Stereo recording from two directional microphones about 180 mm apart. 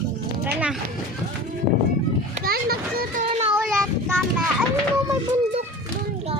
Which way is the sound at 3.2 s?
30° right (ahead or behind).